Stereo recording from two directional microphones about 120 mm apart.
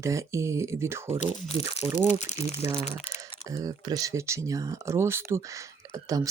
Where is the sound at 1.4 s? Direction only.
60° left (ahead or behind).